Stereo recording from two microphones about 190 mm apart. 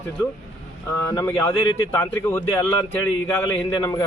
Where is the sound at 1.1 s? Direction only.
15° left (ahead or behind).